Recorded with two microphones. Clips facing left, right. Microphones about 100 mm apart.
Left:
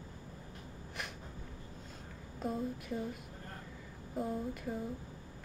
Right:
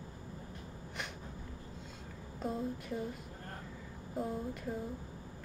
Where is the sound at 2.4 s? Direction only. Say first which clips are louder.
Even; centre (ahead or behind).